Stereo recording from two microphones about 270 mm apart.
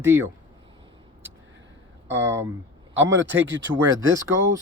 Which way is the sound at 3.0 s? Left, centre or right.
Right.